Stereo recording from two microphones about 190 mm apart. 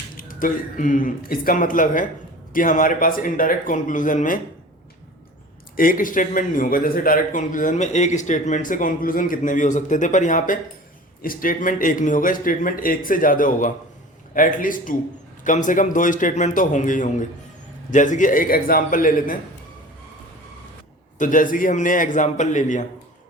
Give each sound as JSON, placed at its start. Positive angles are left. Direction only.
{"t": 0.2, "sound": "a man's voice", "side_deg": 45}
{"t": 5.7, "sound": "a man's voice", "side_deg": 45}
{"t": 21.2, "sound": "a man's voice", "side_deg": 45}